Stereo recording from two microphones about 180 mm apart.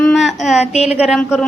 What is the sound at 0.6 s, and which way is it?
Speech, 35° left (ahead or behind).